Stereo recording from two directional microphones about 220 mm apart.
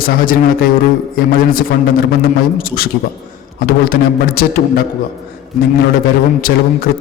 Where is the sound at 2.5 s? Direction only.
40° left (ahead or behind).